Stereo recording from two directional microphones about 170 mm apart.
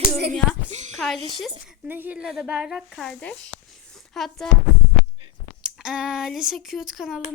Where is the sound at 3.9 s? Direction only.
Centre (ahead or behind).